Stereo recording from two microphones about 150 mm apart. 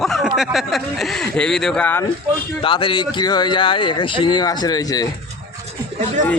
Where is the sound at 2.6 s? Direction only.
35° left (ahead or behind).